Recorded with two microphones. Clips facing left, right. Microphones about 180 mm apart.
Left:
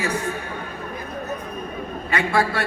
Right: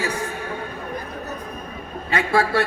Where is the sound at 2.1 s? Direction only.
30° right (ahead or behind).